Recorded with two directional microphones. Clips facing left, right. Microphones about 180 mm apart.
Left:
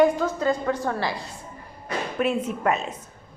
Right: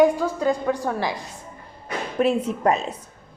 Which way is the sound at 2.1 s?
35° right (ahead or behind).